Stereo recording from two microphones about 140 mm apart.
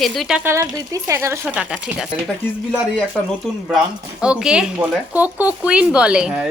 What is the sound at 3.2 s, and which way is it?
Speech, 5° left (ahead or behind).